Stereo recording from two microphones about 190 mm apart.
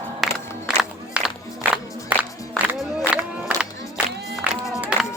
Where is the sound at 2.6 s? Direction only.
5° right (ahead or behind).